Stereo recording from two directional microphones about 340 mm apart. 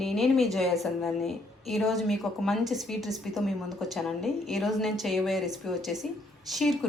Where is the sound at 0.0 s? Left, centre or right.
Centre.